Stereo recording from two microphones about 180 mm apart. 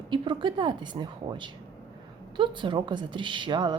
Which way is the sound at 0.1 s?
25° right (ahead or behind).